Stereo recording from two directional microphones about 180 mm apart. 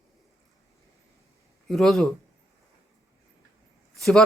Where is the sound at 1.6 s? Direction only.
Centre (ahead or behind).